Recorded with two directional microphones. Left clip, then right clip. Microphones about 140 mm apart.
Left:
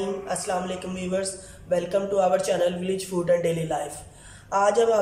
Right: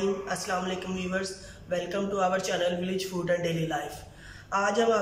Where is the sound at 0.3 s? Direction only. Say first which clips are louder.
Left 3 dB; 35° left (ahead or behind).